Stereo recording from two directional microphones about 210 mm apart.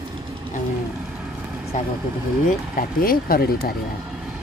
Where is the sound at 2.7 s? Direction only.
45° left (ahead or behind).